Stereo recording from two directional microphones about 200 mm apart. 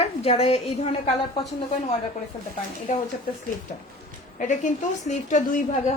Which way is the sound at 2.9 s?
40° left (ahead or behind).